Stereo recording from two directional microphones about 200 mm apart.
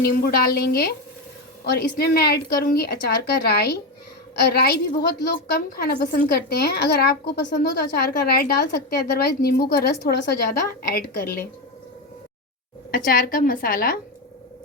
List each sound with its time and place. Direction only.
0.0 s a woman's voice: 50° left (ahead or behind)
12.9 s a woman's voice: 45° left (ahead or behind)